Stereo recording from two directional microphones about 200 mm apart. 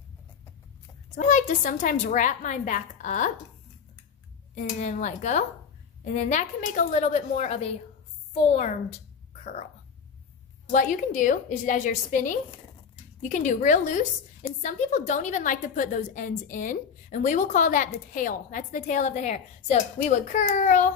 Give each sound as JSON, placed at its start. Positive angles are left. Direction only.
{"t": 1.1, "sound": "a woman's voice", "side_deg": 40}
{"t": 4.6, "sound": "a woman's voice", "side_deg": 40}
{"t": 10.7, "sound": "a woman's voice", "side_deg": 40}